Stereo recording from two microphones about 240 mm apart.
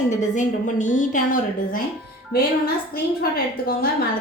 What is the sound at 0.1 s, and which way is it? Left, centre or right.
A woman's voice, left.